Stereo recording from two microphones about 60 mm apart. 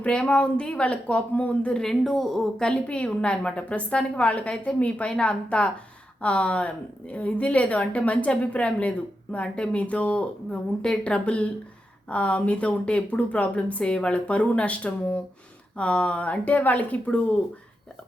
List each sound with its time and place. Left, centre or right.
0.0 s speech: centre
1.8 s a woman's voice: centre
2.6 s a woman's voice: centre